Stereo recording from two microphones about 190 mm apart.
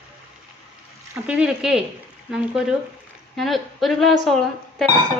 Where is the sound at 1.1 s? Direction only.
5° right (ahead or behind).